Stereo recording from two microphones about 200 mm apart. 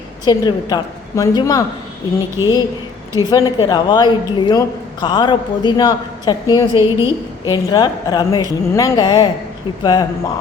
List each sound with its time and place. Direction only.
0.3 s a man's voice: 20° left (ahead or behind)
3.2 s a man's voice: 20° left (ahead or behind)